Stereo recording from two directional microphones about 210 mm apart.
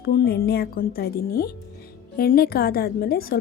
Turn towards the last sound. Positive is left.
turn(degrees=45)  # may be behind; listen again after turning